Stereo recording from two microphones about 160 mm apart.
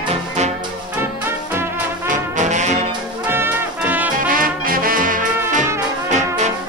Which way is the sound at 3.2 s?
15° right (ahead or behind).